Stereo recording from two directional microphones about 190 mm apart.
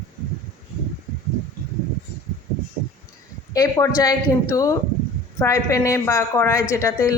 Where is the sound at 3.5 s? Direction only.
15° left (ahead or behind).